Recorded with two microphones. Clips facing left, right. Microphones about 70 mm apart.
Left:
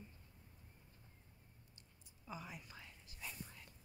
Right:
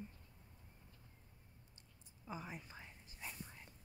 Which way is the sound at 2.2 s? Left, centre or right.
Right.